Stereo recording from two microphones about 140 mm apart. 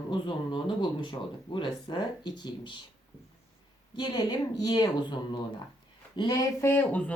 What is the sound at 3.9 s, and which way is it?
Speech, 30° left (ahead or behind).